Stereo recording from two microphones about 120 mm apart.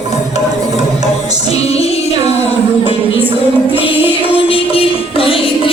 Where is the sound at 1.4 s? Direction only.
60° left (ahead or behind).